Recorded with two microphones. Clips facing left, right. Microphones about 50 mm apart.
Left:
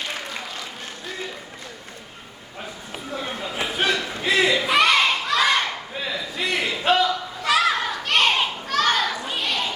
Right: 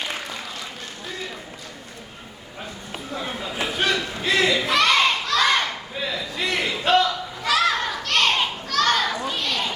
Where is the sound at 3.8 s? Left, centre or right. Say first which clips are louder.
Even; centre.